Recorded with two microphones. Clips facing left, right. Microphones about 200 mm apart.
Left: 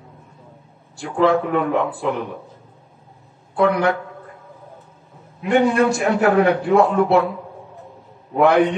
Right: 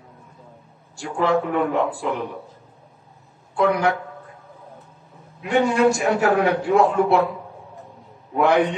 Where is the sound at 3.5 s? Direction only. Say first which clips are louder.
Left 2 dB; 55° left (ahead or behind).